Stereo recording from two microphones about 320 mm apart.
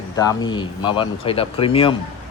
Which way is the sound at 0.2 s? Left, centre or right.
Centre.